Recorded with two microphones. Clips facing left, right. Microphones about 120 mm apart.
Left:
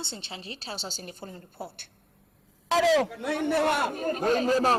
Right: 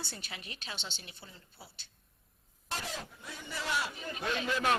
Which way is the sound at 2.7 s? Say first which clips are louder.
Left 19 dB; 90° left.